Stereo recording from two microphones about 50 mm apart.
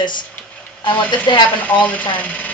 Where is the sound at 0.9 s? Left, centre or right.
Left.